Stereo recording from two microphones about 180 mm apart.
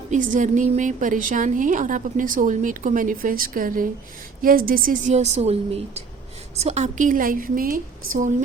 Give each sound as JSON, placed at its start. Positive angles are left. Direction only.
{"t": 0.1, "sound": "a woman's voice", "side_deg": -45}